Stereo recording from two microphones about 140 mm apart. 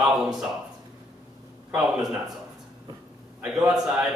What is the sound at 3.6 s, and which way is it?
Speech, 5° right (ahead or behind).